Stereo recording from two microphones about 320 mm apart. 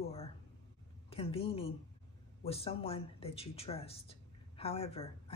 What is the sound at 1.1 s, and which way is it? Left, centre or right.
A woman's voice, centre.